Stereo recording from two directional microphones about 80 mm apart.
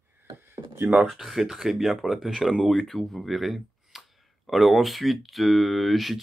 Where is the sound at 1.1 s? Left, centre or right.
Centre.